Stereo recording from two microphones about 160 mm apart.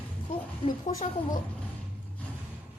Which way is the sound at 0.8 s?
45° left (ahead or behind).